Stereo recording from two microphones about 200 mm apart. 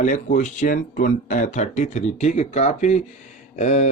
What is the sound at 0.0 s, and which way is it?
Speech, 40° left (ahead or behind).